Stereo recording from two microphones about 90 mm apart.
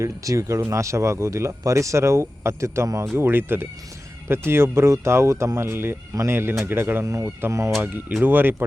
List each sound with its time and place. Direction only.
0.0 s speech: 35° right (ahead or behind)
8.2 s speech: 20° right (ahead or behind)